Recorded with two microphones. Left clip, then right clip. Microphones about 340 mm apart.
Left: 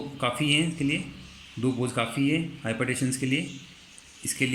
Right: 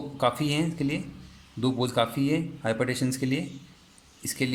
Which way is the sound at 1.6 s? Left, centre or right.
Right.